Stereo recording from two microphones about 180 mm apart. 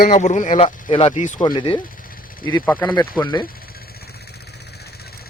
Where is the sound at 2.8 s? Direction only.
25° left (ahead or behind).